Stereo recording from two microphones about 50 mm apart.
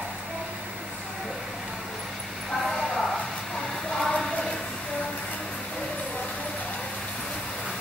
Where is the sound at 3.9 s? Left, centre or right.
Centre.